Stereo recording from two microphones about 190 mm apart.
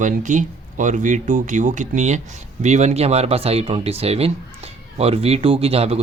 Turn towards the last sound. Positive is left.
turn(degrees=-30)  # may be behind; listen again after turning